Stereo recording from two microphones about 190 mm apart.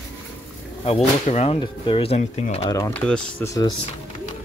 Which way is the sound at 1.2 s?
35° left (ahead or behind).